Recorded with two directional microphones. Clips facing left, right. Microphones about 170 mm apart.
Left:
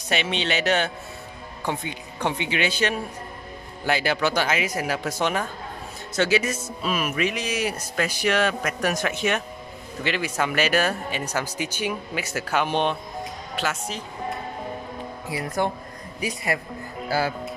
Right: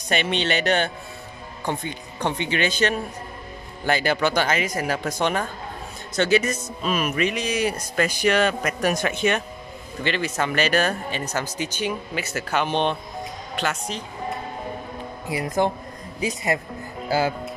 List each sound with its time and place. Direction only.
0.1 s speech: centre (ahead or behind)
2.2 s speech: 5° left (ahead or behind)
15.3 s speech: 20° right (ahead or behind)